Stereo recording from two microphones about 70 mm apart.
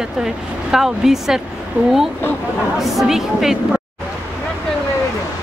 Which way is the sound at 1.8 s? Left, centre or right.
Right.